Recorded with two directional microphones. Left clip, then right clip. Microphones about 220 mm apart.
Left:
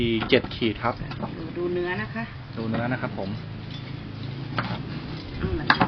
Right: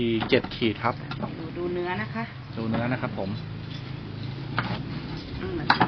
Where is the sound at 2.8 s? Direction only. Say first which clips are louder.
Left 1 dB; 10° right (ahead or behind).